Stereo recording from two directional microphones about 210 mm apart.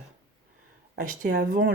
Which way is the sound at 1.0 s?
40° right (ahead or behind).